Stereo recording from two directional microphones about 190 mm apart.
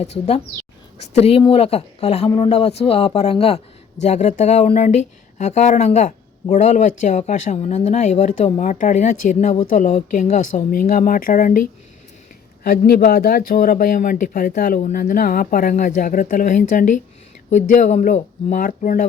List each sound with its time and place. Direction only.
0.0 s speech: 35° left (ahead or behind)
12.6 s speech: 55° left (ahead or behind)